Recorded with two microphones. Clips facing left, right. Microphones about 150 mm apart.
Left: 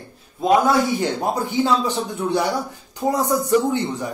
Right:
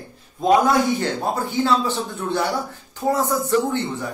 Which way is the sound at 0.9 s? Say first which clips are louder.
Left 1 dB; 15° left (ahead or behind).